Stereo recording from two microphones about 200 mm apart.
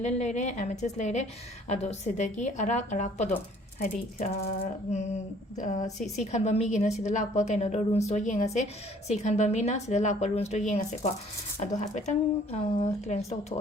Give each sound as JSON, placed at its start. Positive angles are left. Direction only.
{"t": 0.0, "sound": "a woman's voice", "side_deg": 35}